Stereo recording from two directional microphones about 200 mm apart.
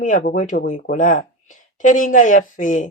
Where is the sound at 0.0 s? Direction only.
40° left (ahead or behind).